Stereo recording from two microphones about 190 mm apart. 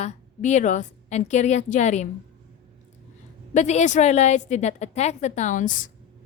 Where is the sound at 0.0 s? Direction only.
40° left (ahead or behind).